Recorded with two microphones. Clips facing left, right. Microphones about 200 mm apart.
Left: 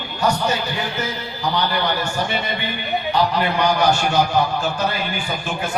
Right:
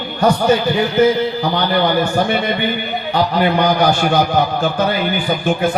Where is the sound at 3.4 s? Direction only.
55° right (ahead or behind).